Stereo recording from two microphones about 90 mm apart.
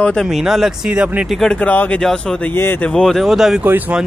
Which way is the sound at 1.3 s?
10° left (ahead or behind).